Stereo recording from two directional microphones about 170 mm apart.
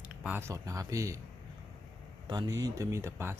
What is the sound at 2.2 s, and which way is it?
Speech, 20° right (ahead or behind).